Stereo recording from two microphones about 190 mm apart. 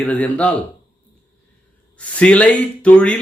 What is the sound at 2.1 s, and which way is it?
Speech, 5° left (ahead or behind).